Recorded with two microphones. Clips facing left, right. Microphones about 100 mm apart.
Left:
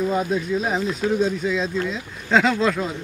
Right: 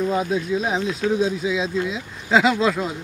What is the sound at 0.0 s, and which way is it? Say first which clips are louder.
Speech: even; centre (ahead or behind).